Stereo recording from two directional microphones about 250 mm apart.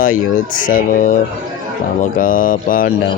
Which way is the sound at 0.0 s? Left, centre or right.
Left.